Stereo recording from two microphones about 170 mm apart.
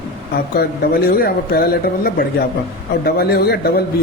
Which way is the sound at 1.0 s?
60° left (ahead or behind).